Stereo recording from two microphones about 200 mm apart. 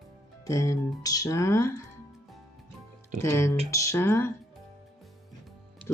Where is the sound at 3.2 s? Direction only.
15° left (ahead or behind).